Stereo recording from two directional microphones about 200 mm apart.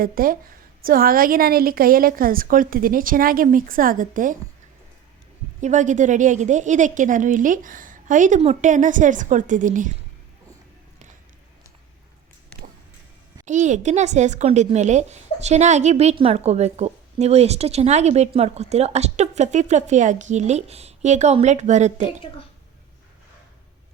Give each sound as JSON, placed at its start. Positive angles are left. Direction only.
{"t": 0.0, "sound": "a woman's voice", "side_deg": -45}
{"t": 5.5, "sound": "a woman's voice", "side_deg": -35}
{"t": 13.4, "sound": "a woman's voice", "side_deg": -35}